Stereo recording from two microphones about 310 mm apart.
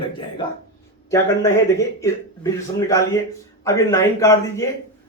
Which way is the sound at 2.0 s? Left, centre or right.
Centre.